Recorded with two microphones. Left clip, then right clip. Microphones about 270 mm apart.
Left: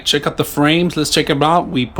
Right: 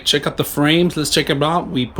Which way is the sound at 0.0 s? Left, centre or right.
Centre.